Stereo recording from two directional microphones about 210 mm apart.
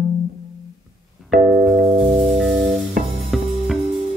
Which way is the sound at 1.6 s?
5° right (ahead or behind).